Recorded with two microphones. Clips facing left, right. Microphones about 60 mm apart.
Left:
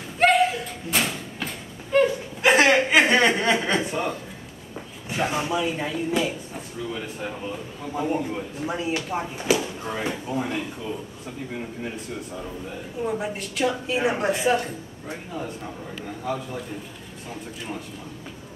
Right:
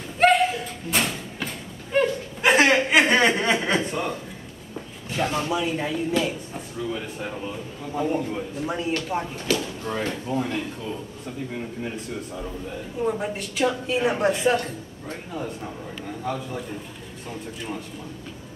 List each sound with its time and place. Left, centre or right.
0.2 s slam: centre
5.1 s speech: centre
5.5 s a woman's voice: centre